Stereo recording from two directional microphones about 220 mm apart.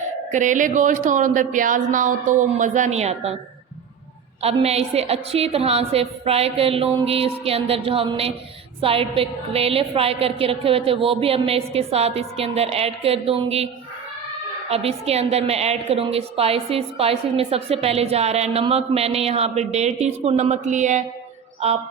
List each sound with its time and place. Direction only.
0.3 s speech: 35° right (ahead or behind)
4.4 s a woman's voice: 30° right (ahead or behind)
14.7 s a woman's voice: 25° right (ahead or behind)